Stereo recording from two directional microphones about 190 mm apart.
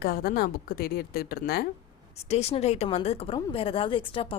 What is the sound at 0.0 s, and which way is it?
A woman's voice, 55° left (ahead or behind).